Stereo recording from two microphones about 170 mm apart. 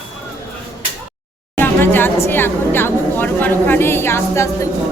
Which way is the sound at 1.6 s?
10° left (ahead or behind).